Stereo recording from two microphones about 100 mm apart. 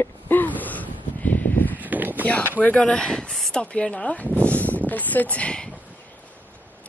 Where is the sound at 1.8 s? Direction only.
15° right (ahead or behind).